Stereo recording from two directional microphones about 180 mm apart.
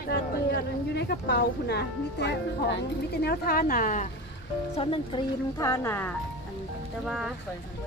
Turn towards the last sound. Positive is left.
turn(degrees=0)  # may be behind; listen again after turning